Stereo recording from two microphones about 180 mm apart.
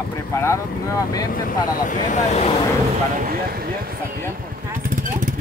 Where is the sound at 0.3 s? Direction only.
15° left (ahead or behind).